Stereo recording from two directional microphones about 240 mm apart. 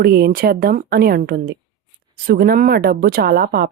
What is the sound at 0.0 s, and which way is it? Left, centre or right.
Speech, right.